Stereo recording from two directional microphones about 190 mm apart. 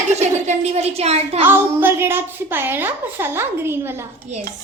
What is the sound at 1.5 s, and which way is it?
A child's voice, 10° right (ahead or behind).